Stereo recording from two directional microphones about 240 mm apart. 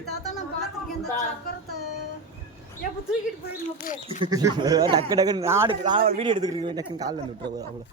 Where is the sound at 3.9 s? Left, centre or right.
Left.